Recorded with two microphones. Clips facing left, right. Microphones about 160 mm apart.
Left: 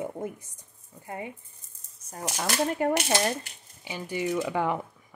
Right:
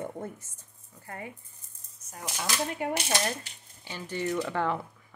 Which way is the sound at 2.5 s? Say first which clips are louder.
Left 6 dB; 45° left (ahead or behind).